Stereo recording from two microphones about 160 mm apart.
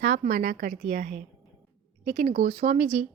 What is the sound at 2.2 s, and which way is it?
Speech, 50° right (ahead or behind).